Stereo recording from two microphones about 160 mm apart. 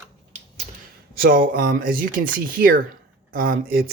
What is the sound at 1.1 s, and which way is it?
Speech, 65° right (ahead or behind).